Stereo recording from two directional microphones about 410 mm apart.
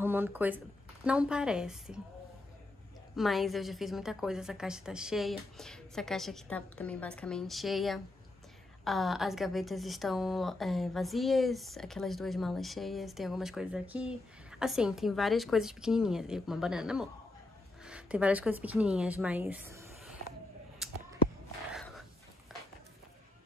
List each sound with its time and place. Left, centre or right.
0.0 s a woman's voice: centre
3.2 s a woman's voice: centre
20.8 s a sound: centre